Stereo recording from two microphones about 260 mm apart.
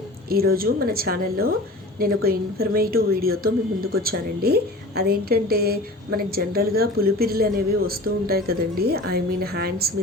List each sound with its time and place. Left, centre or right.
0.3 s a woman's voice: right